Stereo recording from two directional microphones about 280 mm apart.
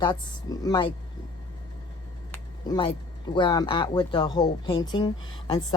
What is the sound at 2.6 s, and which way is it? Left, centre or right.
Speech, centre.